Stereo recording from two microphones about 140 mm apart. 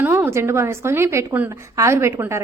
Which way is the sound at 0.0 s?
15° right (ahead or behind).